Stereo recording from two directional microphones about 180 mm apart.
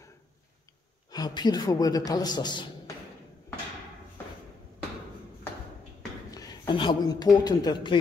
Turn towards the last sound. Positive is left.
turn(degrees=20)  # may be behind; listen again after turning